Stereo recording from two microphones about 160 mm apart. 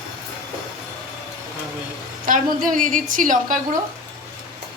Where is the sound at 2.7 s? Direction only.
55° right (ahead or behind).